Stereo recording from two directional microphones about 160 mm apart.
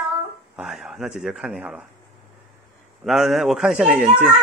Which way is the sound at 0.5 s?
Centre (ahead or behind).